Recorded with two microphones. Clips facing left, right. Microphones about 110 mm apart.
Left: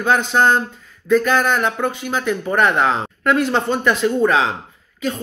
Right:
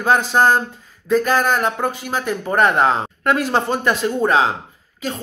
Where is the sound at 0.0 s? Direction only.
35° right (ahead or behind).